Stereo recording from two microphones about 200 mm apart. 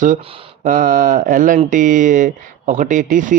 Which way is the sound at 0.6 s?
40° right (ahead or behind).